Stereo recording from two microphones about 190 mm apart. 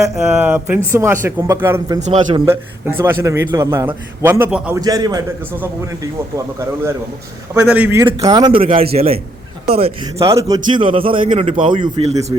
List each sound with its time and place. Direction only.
0.3 s a man's voice: 10° right (ahead or behind)
2.0 s a man's voice: 35° right (ahead or behind)
2.4 s a man's voice: 15° right (ahead or behind)
4.8 s a man's voice: 20° right (ahead or behind)
10.2 s a man's voice: 15° right (ahead or behind)
10.8 s a man's voice: 25° right (ahead or behind)